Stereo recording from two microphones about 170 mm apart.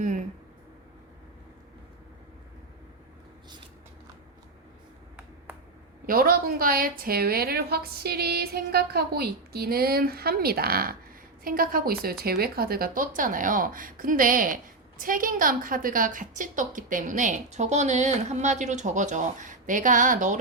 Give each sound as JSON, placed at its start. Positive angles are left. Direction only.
{"t": 6.1, "sound": "a woman's voice", "side_deg": -60}